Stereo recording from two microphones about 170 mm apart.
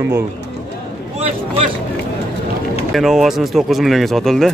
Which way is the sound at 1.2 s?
35° right (ahead or behind).